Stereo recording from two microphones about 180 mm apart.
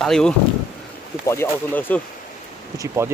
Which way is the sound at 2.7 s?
15° right (ahead or behind).